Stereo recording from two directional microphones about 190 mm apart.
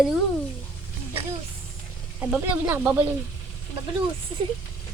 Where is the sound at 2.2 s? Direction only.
10° right (ahead or behind).